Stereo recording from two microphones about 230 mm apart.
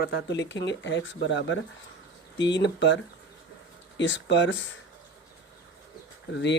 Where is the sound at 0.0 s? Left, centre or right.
Left.